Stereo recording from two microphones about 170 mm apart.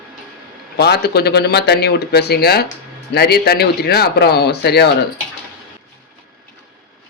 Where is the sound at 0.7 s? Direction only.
75° left (ahead or behind).